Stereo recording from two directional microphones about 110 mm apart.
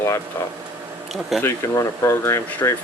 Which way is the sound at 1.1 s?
Centre (ahead or behind).